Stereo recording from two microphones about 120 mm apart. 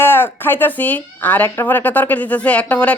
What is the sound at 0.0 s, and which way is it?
Speech, 20° left (ahead or behind).